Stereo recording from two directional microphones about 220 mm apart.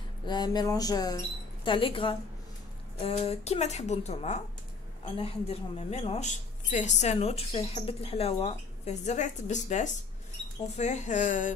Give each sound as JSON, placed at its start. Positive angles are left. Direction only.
{"t": 0.3, "sound": "a woman's voice", "side_deg": 20}